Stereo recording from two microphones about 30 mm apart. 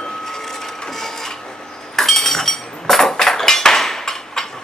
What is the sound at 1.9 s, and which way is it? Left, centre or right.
Chink, centre.